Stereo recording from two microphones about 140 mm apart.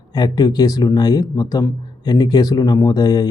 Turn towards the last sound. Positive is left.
turn(degrees=30)  # may be behind; listen again after turning